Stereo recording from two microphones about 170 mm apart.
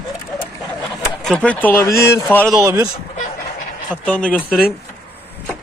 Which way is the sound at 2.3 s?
5° left (ahead or behind).